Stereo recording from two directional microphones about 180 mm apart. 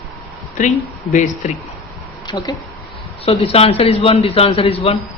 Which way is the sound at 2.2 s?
20° left (ahead or behind).